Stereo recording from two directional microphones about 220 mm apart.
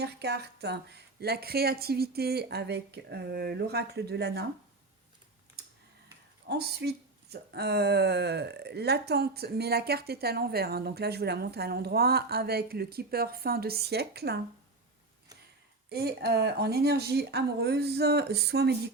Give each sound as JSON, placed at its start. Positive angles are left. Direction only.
{"t": 0.0, "sound": "speech", "side_deg": -50}
{"t": 6.5, "sound": "speech", "side_deg": -45}
{"t": 15.9, "sound": "speech", "side_deg": -45}